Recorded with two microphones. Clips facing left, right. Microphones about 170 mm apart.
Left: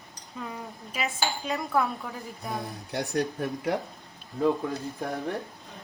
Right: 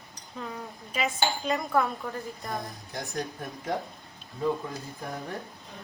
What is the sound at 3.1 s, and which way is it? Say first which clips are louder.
Speech: left 7 dB; 70° left (ahead or behind).